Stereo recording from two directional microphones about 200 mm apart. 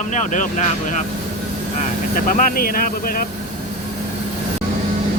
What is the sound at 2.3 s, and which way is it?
Speech, 40° left (ahead or behind).